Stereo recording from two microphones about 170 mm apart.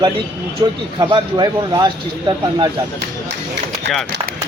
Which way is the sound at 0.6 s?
30° right (ahead or behind).